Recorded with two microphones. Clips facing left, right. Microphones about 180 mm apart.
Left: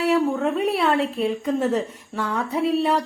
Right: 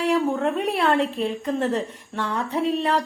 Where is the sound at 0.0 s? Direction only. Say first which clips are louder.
Left 1 dB; centre (ahead or behind).